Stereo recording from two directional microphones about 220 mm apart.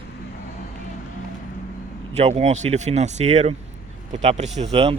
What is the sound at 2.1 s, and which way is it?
Speech, 30° right (ahead or behind).